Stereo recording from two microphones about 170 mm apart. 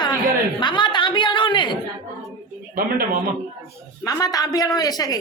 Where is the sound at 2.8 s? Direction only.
55° right (ahead or behind).